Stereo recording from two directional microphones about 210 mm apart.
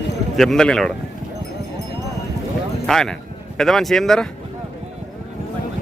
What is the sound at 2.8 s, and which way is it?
Speech, centre (ahead or behind).